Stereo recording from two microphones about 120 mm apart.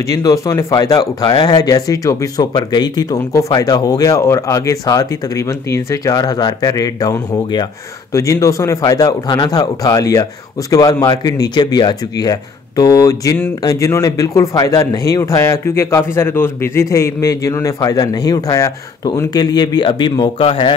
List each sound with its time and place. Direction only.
0.1 s a man's voice: 25° left (ahead or behind); by 20.7 s 45° left (ahead or behind)